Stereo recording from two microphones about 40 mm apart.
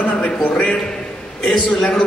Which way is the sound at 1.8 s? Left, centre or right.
Left.